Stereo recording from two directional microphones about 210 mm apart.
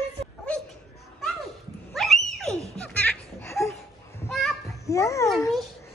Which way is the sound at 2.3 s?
Centre (ahead or behind).